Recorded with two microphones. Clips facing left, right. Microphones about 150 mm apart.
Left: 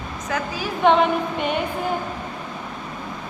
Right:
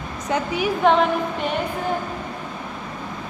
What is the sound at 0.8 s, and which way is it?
Speech, centre (ahead or behind).